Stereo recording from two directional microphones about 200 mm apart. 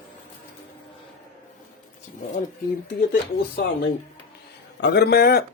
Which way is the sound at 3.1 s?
55° left (ahead or behind).